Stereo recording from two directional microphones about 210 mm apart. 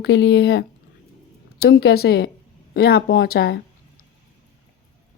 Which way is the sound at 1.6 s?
50° left (ahead or behind).